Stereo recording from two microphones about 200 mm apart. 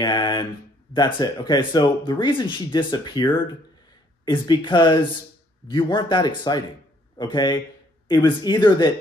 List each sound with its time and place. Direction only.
0.0 s speech: 20° left (ahead or behind)
4.3 s speech: 25° left (ahead or behind)